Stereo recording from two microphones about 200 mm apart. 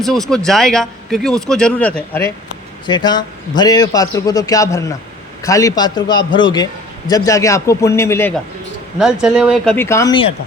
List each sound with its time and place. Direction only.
0.0 s speech: centre (ahead or behind)
2.8 s a man's voice: 20° left (ahead or behind)
9.2 s speech: 5° right (ahead or behind)
9.7 s a man's voice: 15° left (ahead or behind)